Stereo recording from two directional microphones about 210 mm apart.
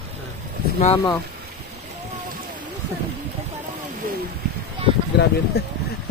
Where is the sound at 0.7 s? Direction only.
30° left (ahead or behind).